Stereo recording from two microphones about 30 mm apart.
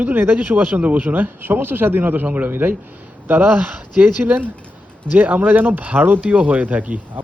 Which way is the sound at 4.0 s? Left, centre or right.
Right.